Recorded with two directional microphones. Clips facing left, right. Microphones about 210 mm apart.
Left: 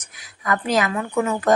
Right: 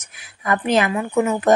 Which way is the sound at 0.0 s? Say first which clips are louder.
Right 2 dB; 25° right (ahead or behind).